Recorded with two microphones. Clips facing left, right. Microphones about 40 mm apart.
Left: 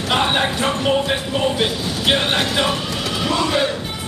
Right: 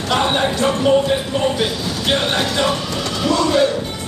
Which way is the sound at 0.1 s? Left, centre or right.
Centre.